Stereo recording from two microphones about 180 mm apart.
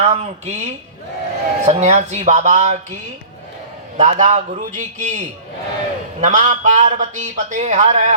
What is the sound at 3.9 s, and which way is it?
A man's voice, 45° right (ahead or behind).